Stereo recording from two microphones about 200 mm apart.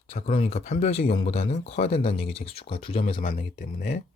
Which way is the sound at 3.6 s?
45° left (ahead or behind).